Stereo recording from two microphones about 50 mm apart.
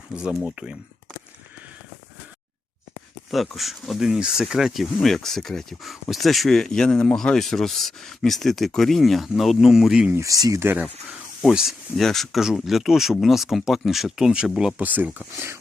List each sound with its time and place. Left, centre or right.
0.5 s speech: centre
3.3 s speech: centre
4.1 s speech: centre
10.6 s speech: right
11.4 s speech: centre
11.9 s speech: centre
14.8 s speech: right